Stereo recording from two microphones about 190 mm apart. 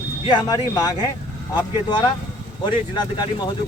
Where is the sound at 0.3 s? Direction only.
20° left (ahead or behind).